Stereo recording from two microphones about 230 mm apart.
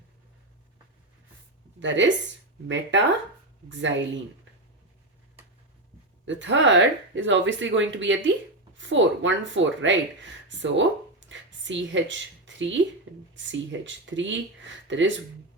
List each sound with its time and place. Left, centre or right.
1.8 s speech: right
6.2 s speech: right